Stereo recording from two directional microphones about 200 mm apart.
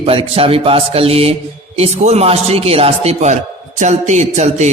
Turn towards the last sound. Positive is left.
turn(degrees=-35)  # may be behind; listen again after turning